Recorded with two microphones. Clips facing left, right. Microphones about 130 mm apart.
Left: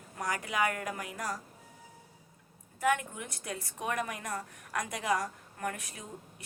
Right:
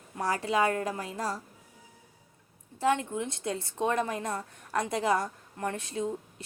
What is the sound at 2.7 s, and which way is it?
A woman's voice, 25° right (ahead or behind).